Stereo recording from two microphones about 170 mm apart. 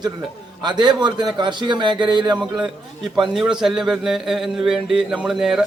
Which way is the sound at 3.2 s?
Centre (ahead or behind).